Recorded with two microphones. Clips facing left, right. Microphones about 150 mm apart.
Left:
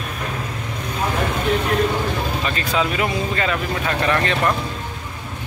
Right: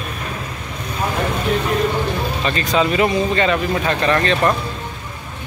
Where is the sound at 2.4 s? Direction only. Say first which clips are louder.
Right 6 dB; 5° left (ahead or behind).